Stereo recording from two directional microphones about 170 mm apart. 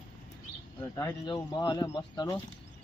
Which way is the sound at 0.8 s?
20° left (ahead or behind).